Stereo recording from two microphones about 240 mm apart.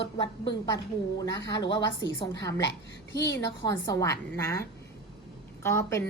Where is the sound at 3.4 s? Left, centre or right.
Centre.